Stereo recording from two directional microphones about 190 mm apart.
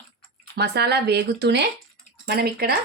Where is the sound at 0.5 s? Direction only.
60° right (ahead or behind).